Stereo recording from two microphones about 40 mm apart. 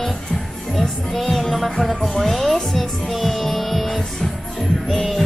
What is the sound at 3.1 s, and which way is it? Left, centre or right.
Heart sounds, centre.